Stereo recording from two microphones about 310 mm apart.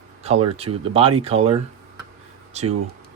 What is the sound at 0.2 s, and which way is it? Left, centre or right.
Speech, centre.